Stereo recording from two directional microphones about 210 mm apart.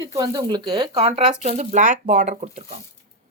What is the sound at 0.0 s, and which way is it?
Speech, 20° right (ahead or behind).